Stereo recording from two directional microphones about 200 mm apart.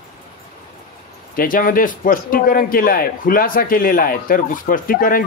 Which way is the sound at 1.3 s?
45° left (ahead or behind).